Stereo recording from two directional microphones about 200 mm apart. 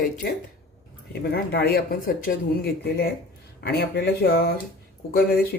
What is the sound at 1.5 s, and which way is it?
Speech, 50° left (ahead or behind).